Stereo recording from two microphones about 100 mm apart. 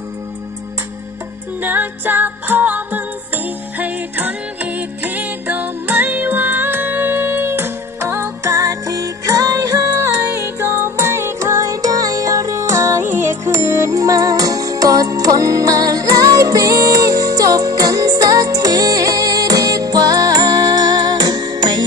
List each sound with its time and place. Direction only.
1.6 s music: 20° right (ahead or behind); by 21.8 s 45° right (ahead or behind)